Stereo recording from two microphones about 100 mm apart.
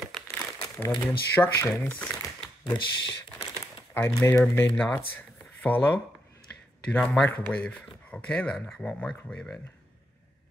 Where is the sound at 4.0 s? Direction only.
30° left (ahead or behind).